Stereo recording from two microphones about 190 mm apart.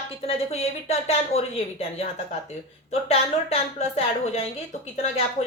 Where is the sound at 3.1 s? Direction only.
35° left (ahead or behind).